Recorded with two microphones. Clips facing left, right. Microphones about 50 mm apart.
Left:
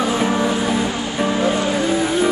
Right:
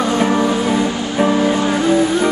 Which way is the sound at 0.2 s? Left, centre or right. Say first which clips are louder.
Right 3 dB; centre.